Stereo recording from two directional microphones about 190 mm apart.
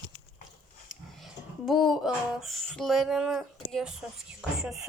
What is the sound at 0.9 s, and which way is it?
Speech, centre (ahead or behind).